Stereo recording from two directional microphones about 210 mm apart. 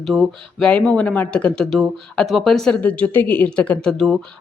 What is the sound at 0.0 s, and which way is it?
A woman's voice, centre (ahead or behind).